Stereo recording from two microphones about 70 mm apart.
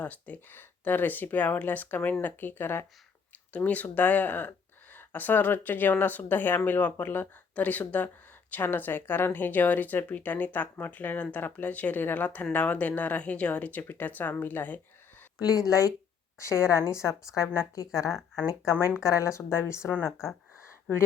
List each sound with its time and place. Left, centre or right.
0.0 s speech: left
15.4 s speech: left
16.4 s speech: left